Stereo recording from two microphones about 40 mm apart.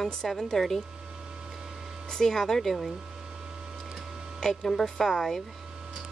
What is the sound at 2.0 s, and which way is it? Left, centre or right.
Speech, centre.